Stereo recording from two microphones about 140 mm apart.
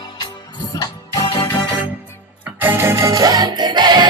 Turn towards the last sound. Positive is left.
turn(degrees=-30)  # may be behind; listen again after turning